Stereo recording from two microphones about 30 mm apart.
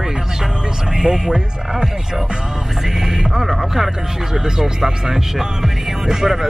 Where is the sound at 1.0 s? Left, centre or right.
Right.